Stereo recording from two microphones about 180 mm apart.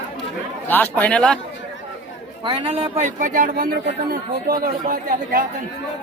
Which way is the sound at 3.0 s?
45° right (ahead or behind).